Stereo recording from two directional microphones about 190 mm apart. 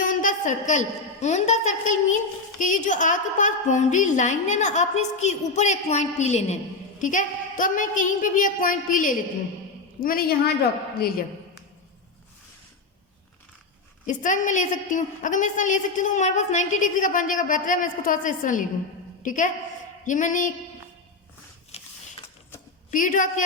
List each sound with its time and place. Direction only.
0.0 s a woman's voice: 45° left (ahead or behind)
14.1 s a woman's voice: 40° left (ahead or behind)
21.7 s a sound: 35° left (ahead or behind)
22.9 s a woman's voice: 45° left (ahead or behind)